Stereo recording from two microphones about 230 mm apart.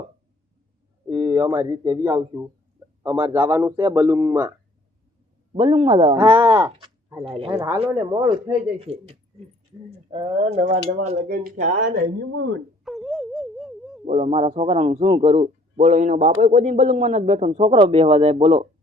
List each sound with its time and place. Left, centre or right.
1.1 s speech: centre
5.5 s speech: right
6.1 s speech: centre
6.7 s a sound: right
7.5 s speech: centre; by 11.7 s right
12.8 s a sound: centre
14.1 s speech: right